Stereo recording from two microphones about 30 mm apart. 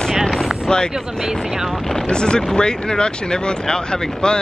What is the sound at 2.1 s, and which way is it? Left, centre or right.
Speech, left.